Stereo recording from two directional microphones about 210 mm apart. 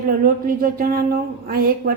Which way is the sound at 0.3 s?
45° right (ahead or behind).